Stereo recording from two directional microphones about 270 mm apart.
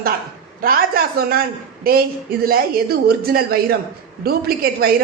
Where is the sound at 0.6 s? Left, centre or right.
Right.